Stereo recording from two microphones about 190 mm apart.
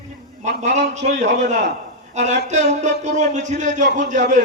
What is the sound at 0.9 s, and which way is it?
A man's voice, 40° right (ahead or behind).